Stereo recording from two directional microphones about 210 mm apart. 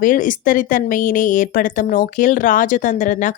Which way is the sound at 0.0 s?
40° left (ahead or behind).